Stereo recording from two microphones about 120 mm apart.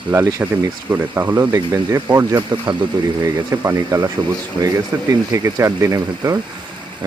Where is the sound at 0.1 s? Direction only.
25° right (ahead or behind).